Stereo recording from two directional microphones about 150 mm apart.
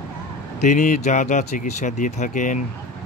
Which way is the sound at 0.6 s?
55° left (ahead or behind).